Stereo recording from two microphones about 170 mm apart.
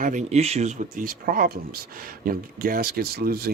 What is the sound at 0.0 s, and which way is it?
A man's voice, 45° right (ahead or behind).